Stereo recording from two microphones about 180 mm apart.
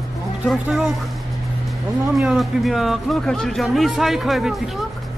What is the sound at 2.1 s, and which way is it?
Speech, centre (ahead or behind).